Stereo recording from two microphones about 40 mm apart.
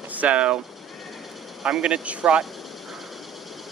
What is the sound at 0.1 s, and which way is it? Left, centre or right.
Speech, right.